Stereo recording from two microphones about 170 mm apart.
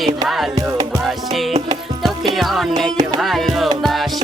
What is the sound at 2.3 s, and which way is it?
Music, centre (ahead or behind).